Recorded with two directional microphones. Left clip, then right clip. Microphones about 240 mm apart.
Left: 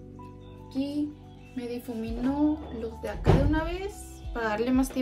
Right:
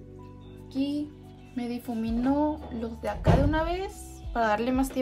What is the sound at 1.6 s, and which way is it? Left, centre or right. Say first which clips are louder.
Speech: right 1 dB; centre.